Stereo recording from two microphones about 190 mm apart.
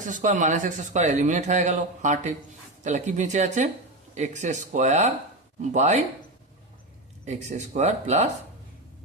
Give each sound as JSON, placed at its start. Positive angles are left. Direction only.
{"t": 0.0, "sound": "speech", "side_deg": -40}
{"t": 7.3, "sound": "speech", "side_deg": -40}